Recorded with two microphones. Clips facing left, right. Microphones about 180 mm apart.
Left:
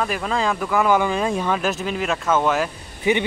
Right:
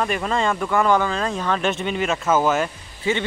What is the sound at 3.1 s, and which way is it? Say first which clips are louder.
Speech: left 3 dB; 15° left (ahead or behind).